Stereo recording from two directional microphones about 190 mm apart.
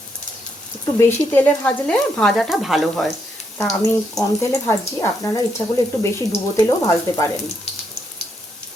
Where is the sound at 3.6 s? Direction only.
15° left (ahead or behind).